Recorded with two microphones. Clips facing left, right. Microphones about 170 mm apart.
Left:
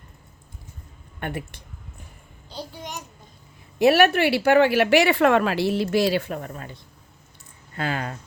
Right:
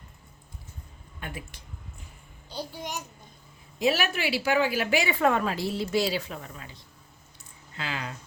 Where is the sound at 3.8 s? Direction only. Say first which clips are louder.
Left 9 dB; 65° left (ahead or behind).